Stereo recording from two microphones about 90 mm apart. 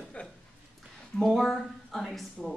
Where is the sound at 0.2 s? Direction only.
15° left (ahead or behind).